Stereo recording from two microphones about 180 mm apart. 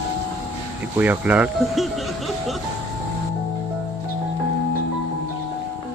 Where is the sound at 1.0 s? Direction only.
10° right (ahead or behind).